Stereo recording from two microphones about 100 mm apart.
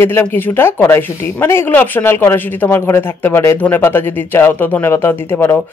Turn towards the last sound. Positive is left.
turn(degrees=20)  # may be behind; listen again after turning